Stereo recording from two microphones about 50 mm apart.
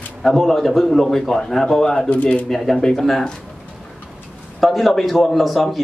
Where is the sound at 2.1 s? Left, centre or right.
Left.